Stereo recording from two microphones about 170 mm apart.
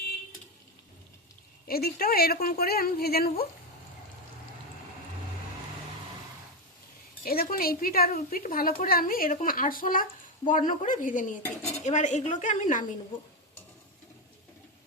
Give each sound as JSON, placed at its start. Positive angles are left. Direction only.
{"t": 1.6, "sound": "a woman's voice", "side_deg": 60}
{"t": 7.3, "sound": "a woman's voice", "side_deg": 60}